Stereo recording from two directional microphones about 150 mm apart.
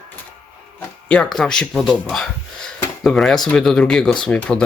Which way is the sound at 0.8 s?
10° left (ahead or behind).